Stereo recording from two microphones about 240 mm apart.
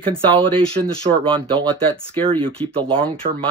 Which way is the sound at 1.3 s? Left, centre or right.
Centre.